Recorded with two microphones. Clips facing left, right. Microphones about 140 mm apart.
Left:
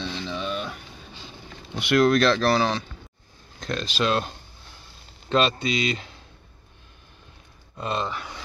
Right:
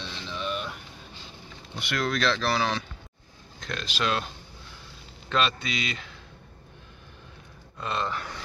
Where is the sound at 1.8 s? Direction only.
65° left (ahead or behind); by 4.2 s 30° left (ahead or behind).